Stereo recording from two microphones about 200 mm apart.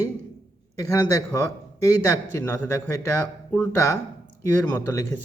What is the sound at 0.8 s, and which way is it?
Speech, 15° left (ahead or behind).